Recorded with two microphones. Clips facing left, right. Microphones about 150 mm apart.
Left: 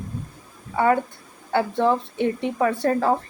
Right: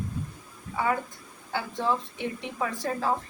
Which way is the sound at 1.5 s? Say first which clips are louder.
Left 8 dB; 60° left (ahead or behind).